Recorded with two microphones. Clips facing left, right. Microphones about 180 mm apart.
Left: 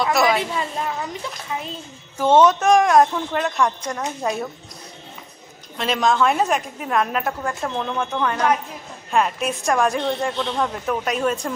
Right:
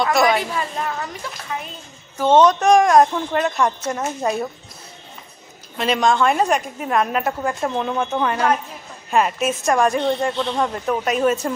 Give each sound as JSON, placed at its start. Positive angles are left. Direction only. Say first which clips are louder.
{"t": 0.0, "sound": "a woman's voice", "louder": "right 1 dB", "side_deg": 0}
{"t": 0.4, "sound": "a woman's voice", "louder": "even", "side_deg": 25}
{"t": 2.1, "sound": "a woman's voice", "louder": "right 1 dB", "side_deg": 10}
{"t": 5.8, "sound": "a woman's voice", "louder": "right 1 dB", "side_deg": 0}